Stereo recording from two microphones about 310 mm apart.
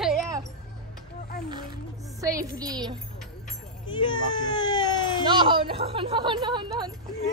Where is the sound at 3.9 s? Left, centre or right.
Centre.